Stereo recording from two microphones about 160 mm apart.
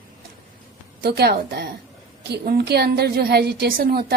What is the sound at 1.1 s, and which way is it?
A woman's voice, 85° right.